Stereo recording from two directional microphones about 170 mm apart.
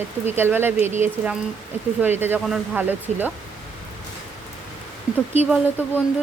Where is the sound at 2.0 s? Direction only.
10° right (ahead or behind).